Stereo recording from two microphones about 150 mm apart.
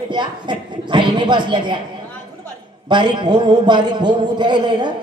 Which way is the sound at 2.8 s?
30° right (ahead or behind).